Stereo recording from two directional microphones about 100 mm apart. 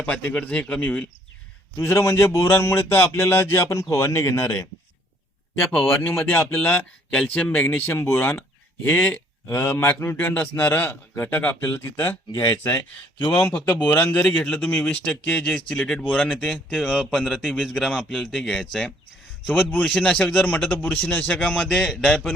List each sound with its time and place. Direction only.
0.0 s a man's voice: 10° left (ahead or behind)
1.7 s speech: 25° left (ahead or behind)
5.8 s a man's voice: 20° left (ahead or behind); by 22.3 s 5° left (ahead or behind)